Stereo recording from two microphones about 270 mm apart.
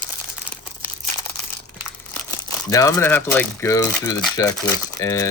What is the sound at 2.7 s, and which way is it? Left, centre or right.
Speech, centre.